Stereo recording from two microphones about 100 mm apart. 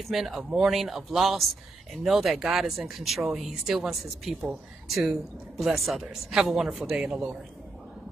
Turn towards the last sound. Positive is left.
turn(degrees=-5)  # may be behind; listen again after turning